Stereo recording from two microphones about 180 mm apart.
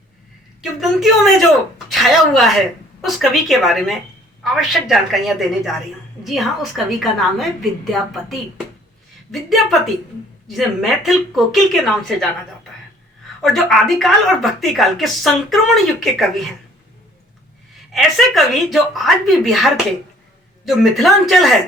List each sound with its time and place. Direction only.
0.6 s a woman's voice: centre (ahead or behind)
13.4 s a woman's voice: centre (ahead or behind)
17.9 s a woman's voice: centre (ahead or behind)